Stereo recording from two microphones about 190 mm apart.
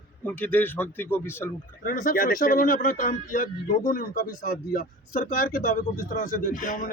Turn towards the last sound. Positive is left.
turn(degrees=45)  # may be behind; listen again after turning